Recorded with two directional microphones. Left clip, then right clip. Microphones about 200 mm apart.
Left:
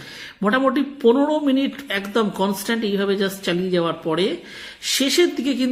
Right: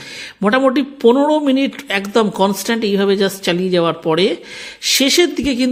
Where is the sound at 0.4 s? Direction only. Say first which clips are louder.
Right 5 dB; 40° right (ahead or behind).